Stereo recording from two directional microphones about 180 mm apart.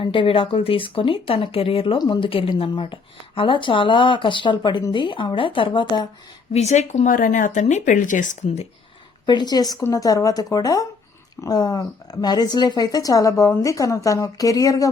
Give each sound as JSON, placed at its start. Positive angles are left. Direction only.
{"t": 0.0, "sound": "speech", "side_deg": 30}
{"t": 6.5, "sound": "speech", "side_deg": 40}
{"t": 9.2, "sound": "speech", "side_deg": 25}